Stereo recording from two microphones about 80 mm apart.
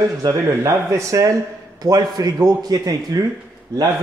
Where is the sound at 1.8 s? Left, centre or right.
Right.